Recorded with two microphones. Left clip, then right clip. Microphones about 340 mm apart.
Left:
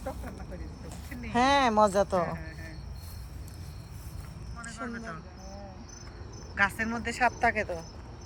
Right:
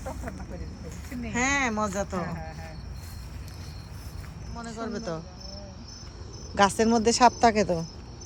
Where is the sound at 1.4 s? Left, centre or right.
Centre.